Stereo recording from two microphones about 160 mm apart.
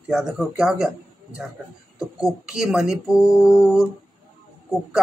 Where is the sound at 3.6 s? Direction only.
Centre (ahead or behind).